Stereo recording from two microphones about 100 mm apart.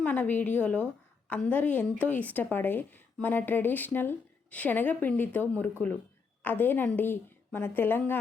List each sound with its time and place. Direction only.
0.0 s a woman's voice: 15° left (ahead or behind)